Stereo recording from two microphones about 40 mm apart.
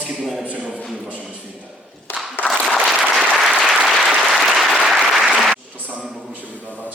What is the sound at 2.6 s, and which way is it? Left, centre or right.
Applause, centre.